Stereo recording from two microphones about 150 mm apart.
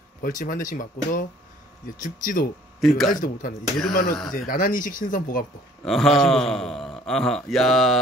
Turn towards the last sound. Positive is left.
turn(degrees=0)  # may be behind; listen again after turning